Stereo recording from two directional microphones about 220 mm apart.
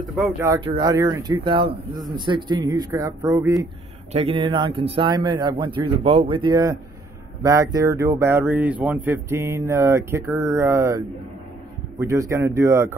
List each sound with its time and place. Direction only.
0.7 s speech: 20° right (ahead or behind)
4.1 s speech: 25° right (ahead or behind)